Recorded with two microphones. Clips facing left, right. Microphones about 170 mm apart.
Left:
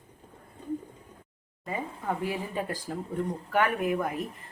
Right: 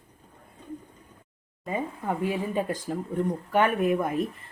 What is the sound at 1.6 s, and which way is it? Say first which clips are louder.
Speech: right 4 dB; 20° right (ahead or behind).